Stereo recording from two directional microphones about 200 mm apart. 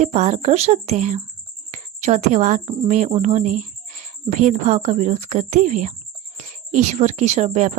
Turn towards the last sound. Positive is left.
turn(degrees=-35)  # may be behind; listen again after turning